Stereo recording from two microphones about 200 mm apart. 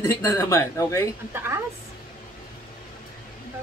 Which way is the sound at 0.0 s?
10° left (ahead or behind).